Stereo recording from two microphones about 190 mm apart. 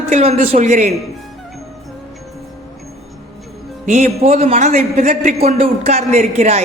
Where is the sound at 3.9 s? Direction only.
35° right (ahead or behind).